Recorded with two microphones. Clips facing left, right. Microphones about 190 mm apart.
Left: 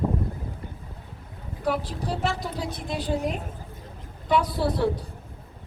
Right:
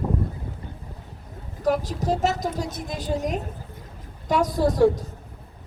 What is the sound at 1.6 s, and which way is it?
A woman's voice, 45° right (ahead or behind).